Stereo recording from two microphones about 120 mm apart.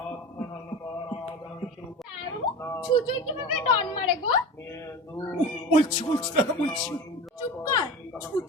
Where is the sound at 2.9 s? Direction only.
45° left (ahead or behind).